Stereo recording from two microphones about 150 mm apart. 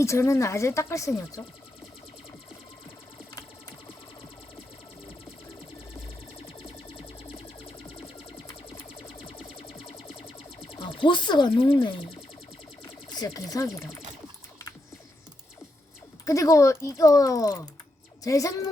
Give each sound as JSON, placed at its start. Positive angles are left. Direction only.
{"t": 0.0, "sound": "speech", "side_deg": 20}
{"t": 6.7, "sound": "music", "side_deg": 35}
{"t": 13.1, "sound": "speech", "side_deg": 25}
{"t": 16.2, "sound": "speech", "side_deg": 20}